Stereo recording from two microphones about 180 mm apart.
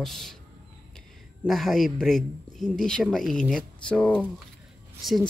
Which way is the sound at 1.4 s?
Centre (ahead or behind).